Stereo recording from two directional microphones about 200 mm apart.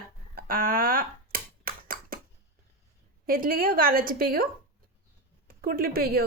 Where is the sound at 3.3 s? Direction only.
45° right (ahead or behind).